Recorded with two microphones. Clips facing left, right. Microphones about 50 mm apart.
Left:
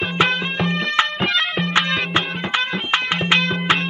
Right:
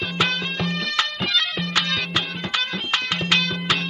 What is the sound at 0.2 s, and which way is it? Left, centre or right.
Music, left.